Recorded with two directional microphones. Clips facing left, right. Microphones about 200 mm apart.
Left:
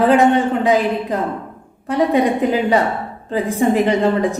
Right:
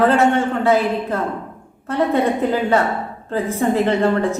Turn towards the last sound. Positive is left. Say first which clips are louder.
# left 1 dB
turn(degrees=15)  # may be behind; listen again after turning